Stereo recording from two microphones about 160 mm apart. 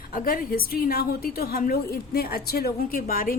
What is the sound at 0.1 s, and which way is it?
A woman's voice, 65° left (ahead or behind).